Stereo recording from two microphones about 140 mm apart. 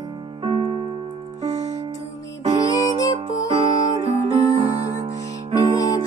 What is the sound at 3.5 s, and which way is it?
Music, 45° right (ahead or behind).